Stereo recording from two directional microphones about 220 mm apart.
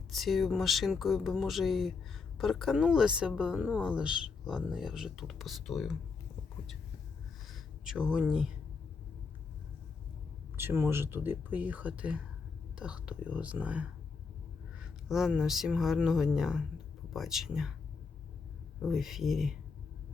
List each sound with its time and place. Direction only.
0.1 s speech: centre (ahead or behind)
7.4 s a sound: centre (ahead or behind)
10.6 s speech: 10° right (ahead or behind)
18.8 s speech: centre (ahead or behind)